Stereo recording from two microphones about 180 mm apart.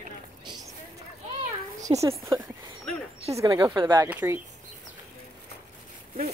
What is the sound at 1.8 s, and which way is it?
Speech, 15° right (ahead or behind).